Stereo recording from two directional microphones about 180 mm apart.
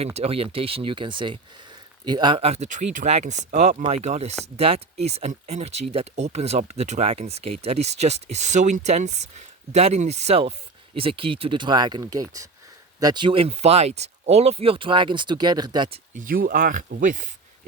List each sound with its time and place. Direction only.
0.0 s speech: 35° right (ahead or behind)
16.1 s speech: 50° right (ahead or behind)